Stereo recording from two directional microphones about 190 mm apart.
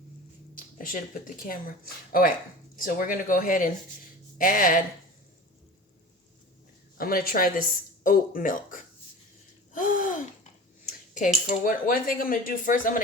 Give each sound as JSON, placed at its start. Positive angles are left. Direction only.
{"t": 0.5, "sound": "speech", "side_deg": 45}
{"t": 6.9, "sound": "speech", "side_deg": 50}
{"t": 9.7, "sound": "gasp", "side_deg": 45}
{"t": 11.4, "sound": "speech", "side_deg": 45}